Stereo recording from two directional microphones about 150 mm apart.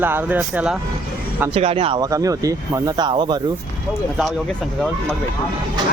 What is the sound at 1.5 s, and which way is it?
Speech, 40° right (ahead or behind).